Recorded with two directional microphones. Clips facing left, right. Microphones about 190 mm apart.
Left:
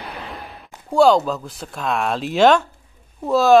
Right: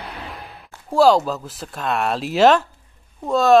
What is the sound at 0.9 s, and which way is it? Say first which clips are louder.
Speech: even; centre (ahead or behind).